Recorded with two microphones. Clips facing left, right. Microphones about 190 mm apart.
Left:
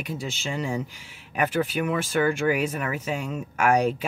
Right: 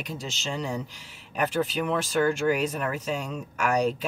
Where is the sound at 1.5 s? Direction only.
55° left (ahead or behind).